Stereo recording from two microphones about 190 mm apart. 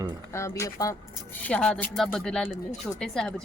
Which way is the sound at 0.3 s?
15° left (ahead or behind).